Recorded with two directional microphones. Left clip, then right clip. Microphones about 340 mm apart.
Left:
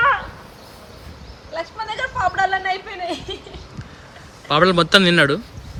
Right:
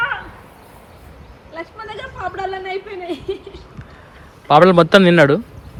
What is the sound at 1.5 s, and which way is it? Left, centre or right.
A woman's voice, centre.